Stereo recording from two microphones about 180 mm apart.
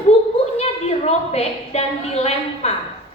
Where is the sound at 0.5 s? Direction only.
35° left (ahead or behind).